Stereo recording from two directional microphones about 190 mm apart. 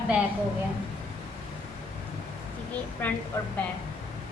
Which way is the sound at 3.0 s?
10° left (ahead or behind).